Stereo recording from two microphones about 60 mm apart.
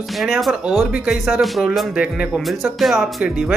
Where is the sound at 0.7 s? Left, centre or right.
Right.